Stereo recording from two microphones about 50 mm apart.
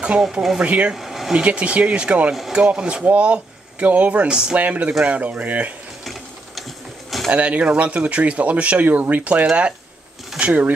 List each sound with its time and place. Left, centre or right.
0.6 s speech: right
0.9 s air conditioning: centre
1.3 s speech: right
4.6 s speech: right
7.2 s speech: right
10.4 s speech: right